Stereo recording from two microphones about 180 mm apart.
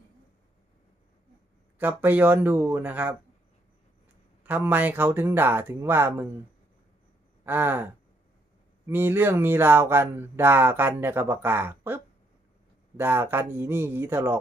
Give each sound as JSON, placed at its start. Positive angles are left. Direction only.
{"t": 1.8, "sound": "speech", "side_deg": -10}
{"t": 4.4, "sound": "speech", "side_deg": -10}
{"t": 7.4, "sound": "gasp", "side_deg": -10}
{"t": 8.9, "sound": "speech", "side_deg": -10}